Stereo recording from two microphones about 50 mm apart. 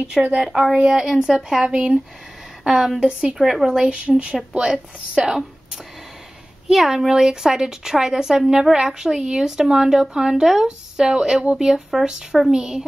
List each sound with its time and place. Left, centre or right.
0.4 s a woman's voice: centre
3.3 s a woman's voice: centre
3.9 s a woman's voice: right
6.7 s a woman's voice: centre